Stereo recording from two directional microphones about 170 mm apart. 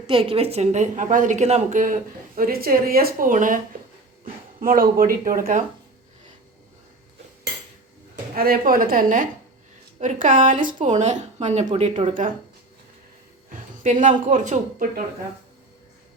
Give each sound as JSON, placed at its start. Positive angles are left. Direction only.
{"t": 0.1, "sound": "a woman's voice", "side_deg": -35}
{"t": 4.6, "sound": "speech", "side_deg": -55}
{"t": 8.4, "sound": "a woman's voice", "side_deg": -55}
{"t": 13.8, "sound": "a woman's voice", "side_deg": -50}